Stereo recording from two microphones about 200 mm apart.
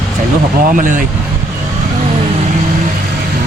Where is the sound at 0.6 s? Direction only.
40° right (ahead or behind).